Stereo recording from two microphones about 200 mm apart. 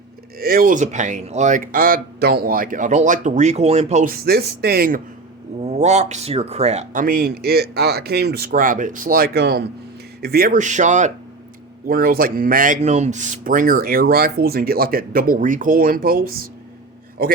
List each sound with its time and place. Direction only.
0.3 s speech: 45° right (ahead or behind)
5.5 s speech: 35° right (ahead or behind)